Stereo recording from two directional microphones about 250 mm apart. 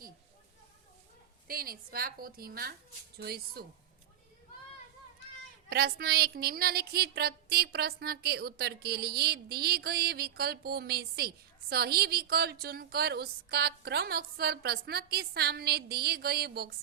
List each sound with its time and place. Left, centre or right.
1.5 s speech: right
5.6 s speech: right